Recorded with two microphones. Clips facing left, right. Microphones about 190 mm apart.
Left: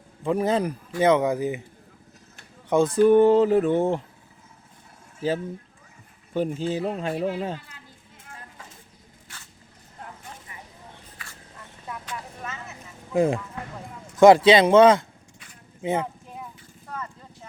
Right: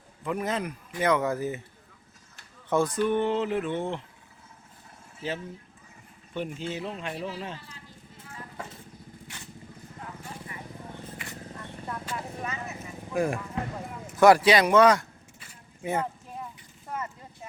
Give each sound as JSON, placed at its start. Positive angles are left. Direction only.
{"t": 0.3, "sound": "a man's voice", "side_deg": 30}
{"t": 2.6, "sound": "speech", "side_deg": 15}
{"t": 3.0, "sound": "a sound", "side_deg": 40}
{"t": 6.3, "sound": "a sound", "side_deg": 35}
{"t": 7.1, "sound": "speech", "side_deg": 55}
{"t": 12.0, "sound": "vehicle", "side_deg": -5}
{"t": 13.1, "sound": "a man's voice", "side_deg": 20}